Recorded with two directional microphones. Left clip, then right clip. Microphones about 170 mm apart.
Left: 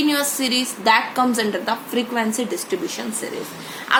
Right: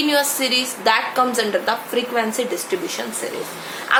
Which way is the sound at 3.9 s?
25° left (ahead or behind).